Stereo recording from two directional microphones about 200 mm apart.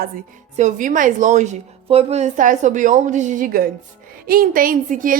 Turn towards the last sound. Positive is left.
turn(degrees=-40)  # may be behind; listen again after turning